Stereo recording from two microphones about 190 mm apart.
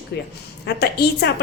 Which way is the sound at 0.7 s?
60° left (ahead or behind).